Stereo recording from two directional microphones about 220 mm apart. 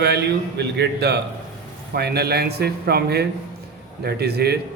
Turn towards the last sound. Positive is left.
turn(degrees=-45)  # may be behind; listen again after turning